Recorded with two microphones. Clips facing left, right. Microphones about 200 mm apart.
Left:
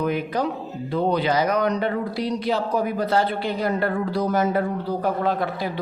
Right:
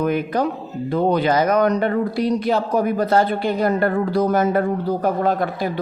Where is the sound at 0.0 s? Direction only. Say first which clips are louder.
Right 4 dB; 50° right (ahead or behind).